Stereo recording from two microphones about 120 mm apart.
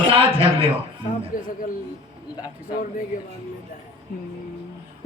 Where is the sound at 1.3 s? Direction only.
90° left.